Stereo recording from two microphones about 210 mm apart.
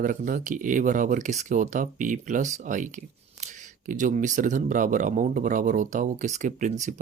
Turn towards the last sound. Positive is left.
turn(degrees=-35)  # may be behind; listen again after turning